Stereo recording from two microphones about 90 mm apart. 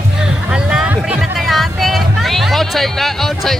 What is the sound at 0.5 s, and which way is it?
Music, 10° right (ahead or behind).